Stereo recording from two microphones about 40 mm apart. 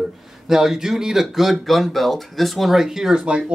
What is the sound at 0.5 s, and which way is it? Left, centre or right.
Speech, centre.